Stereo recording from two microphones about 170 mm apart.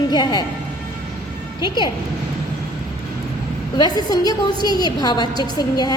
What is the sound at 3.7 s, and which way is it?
A woman's voice, 25° left (ahead or behind).